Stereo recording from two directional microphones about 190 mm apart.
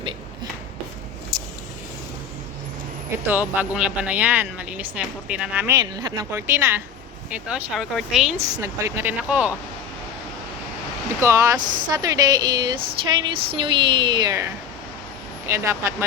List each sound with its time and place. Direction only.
3.2 s speech: 10° right (ahead or behind)
8.4 s speech: 15° right (ahead or behind)
11.2 s speech: 15° right (ahead or behind)